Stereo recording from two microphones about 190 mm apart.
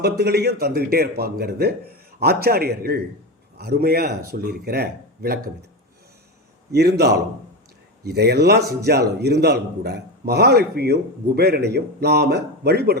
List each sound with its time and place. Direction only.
0.0 s a man's voice: 55° right (ahead or behind)
6.7 s a man's voice: 60° right (ahead or behind)